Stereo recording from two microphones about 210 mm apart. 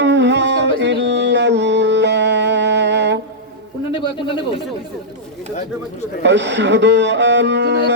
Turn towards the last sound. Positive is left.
turn(degrees=-55)  # may be behind; listen again after turning